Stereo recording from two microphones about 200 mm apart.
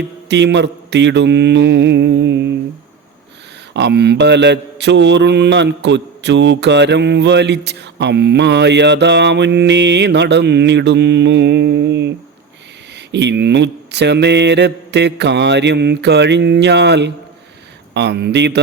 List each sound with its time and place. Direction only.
0.3 s mantra: 60° right (ahead or behind)
3.8 s mantra: 55° right (ahead or behind)